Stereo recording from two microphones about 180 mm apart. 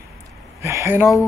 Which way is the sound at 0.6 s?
15° right (ahead or behind).